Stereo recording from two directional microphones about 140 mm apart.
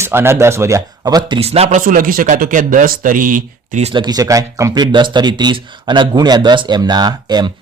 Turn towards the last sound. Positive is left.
turn(degrees=-30)  # may be behind; listen again after turning